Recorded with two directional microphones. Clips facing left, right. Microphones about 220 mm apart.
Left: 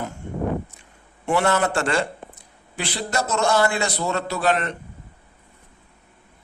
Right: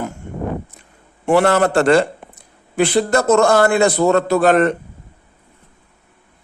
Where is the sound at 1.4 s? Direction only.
45° right (ahead or behind).